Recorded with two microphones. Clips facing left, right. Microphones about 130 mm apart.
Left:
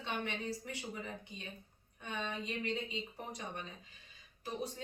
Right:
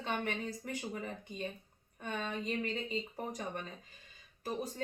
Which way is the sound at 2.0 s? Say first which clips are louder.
Right 2 dB; 45° right (ahead or behind).